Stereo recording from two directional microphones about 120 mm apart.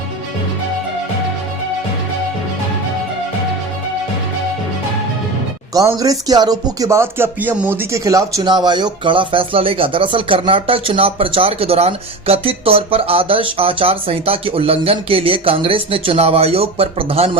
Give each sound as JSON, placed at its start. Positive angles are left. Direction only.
{"t": 5.7, "sound": "speech", "side_deg": -30}